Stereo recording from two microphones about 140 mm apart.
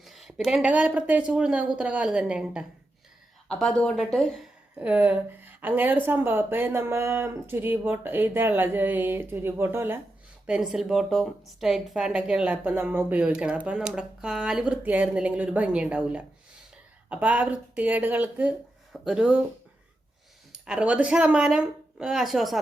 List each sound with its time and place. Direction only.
0.0 s a woman's voice: centre (ahead or behind)
3.5 s speech: 5° left (ahead or behind)
4.7 s a woman's voice: 10° right (ahead or behind)
10.4 s a woman's voice: 5° right (ahead or behind)
20.7 s speech: 10° right (ahead or behind)